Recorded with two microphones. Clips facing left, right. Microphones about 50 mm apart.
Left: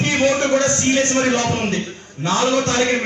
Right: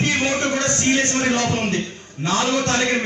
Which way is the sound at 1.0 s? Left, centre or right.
Left.